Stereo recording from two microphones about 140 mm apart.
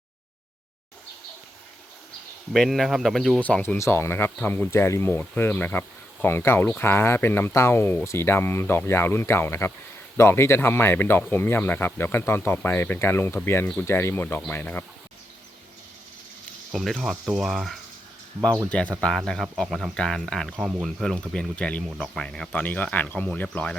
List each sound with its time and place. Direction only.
2.5 s cricket: centre (ahead or behind)
3.4 s speech: 10° left (ahead or behind)
16.7 s cricket: centre (ahead or behind)
18.7 s speech: 10° left (ahead or behind)
19.0 s cricket: 5° left (ahead or behind)
20.6 s speech: 10° right (ahead or behind)
20.8 s speech: centre (ahead or behind)